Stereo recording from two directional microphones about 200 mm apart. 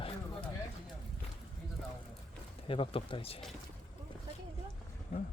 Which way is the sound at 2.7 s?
25° left (ahead or behind).